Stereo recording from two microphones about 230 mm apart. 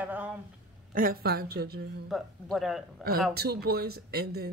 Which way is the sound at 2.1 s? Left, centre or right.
Centre.